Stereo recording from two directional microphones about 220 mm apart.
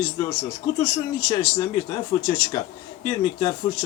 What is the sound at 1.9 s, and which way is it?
A man's voice, 20° left (ahead or behind).